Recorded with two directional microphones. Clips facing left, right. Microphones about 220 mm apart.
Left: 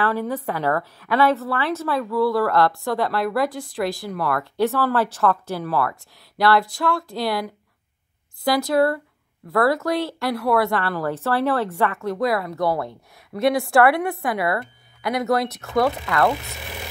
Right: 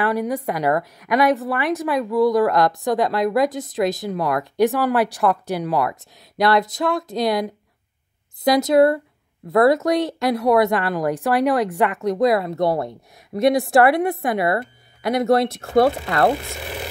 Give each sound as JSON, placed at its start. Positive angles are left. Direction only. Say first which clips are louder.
{"t": 0.0, "sound": "a woman's voice", "louder": "right 2 dB", "side_deg": -15}